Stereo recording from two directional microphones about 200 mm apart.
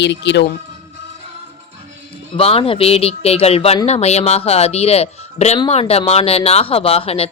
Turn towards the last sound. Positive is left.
turn(degrees=30)  # may be behind; listen again after turning